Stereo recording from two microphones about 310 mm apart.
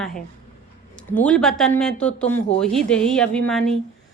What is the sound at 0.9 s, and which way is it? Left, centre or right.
A woman's voice, centre.